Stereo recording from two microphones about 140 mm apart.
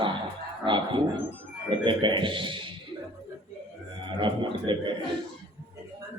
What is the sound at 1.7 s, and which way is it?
A man's voice, 35° right (ahead or behind).